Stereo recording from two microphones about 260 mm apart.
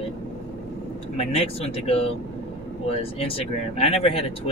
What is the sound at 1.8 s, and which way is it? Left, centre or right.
Speech, left.